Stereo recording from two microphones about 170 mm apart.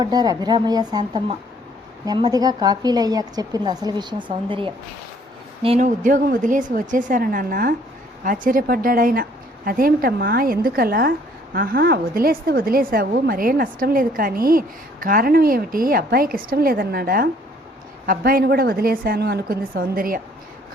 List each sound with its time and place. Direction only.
0.0 s a woman's voice: 25° right (ahead or behind)
5.8 s a woman's voice: 50° right (ahead or behind)